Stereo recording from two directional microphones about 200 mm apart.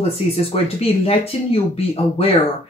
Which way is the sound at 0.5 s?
30° left (ahead or behind).